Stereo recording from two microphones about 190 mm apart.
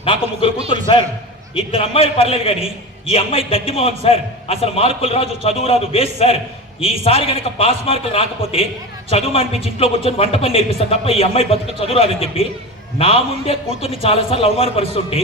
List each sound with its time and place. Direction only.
0.0 s speech: 30° left (ahead or behind)
0.7 s a sound: 25° left (ahead or behind)
1.5 s a man's voice: 30° left (ahead or behind)